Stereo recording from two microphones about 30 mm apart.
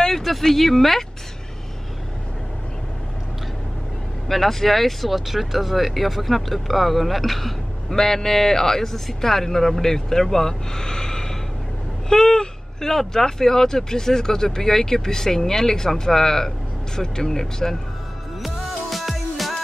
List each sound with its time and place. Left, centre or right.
0.2 s speech: centre
4.3 s speech: centre
7.9 s speech: centre
18.4 s music: centre